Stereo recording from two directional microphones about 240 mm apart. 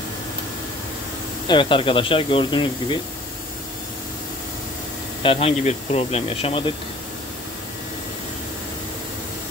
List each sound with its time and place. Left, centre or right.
1.5 s speech: centre
5.2 s speech: left